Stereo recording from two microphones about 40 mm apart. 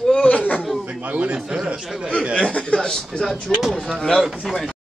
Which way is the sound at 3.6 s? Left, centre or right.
Centre.